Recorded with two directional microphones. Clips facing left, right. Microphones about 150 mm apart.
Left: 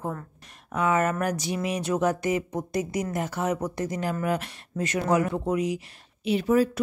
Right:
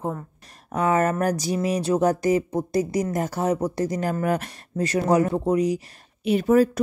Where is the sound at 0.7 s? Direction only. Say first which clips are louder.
Right 3 dB; 40° right (ahead or behind).